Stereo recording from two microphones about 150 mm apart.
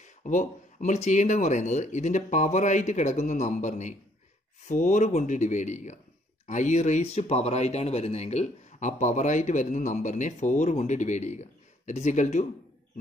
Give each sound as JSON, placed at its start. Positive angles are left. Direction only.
{"t": 0.0, "sound": "speech", "side_deg": 55}